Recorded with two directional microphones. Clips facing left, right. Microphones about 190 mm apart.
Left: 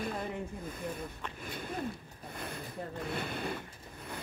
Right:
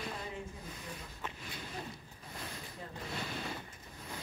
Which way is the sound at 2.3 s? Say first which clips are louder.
Left 4 dB; 60° left (ahead or behind).